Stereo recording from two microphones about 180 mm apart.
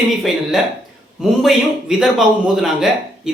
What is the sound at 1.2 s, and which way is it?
Speech, centre (ahead or behind).